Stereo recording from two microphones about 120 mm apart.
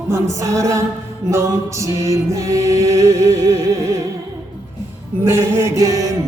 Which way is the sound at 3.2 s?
65° right (ahead or behind).